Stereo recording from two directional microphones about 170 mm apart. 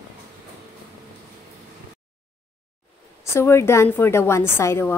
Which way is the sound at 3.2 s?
15° left (ahead or behind).